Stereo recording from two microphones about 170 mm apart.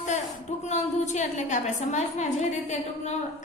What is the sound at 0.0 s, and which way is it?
A woman's voice, 45° left (ahead or behind).